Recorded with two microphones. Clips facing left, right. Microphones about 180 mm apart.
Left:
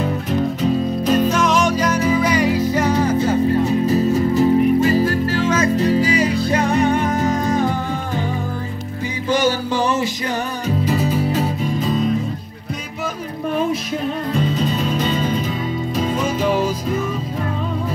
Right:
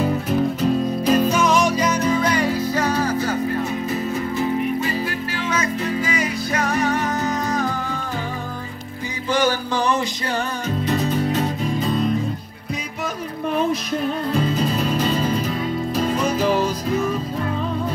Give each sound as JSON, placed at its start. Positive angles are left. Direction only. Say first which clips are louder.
{"t": 0.0, "sound": "music", "louder": "even", "side_deg": 0}
{"t": 3.6, "sound": "music", "louder": "left 7 dB", "side_deg": 40}
{"t": 10.9, "sound": "music", "louder": "even", "side_deg": 5}
{"t": 14.3, "sound": "music", "louder": "left 1 dB", "side_deg": 0}